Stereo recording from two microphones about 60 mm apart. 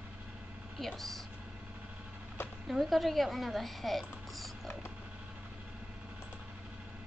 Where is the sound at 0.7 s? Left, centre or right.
Centre.